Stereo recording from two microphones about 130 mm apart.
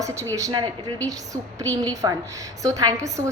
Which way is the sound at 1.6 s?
10° left (ahead or behind).